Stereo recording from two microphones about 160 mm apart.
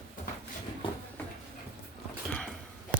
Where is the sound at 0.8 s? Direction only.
35° left (ahead or behind).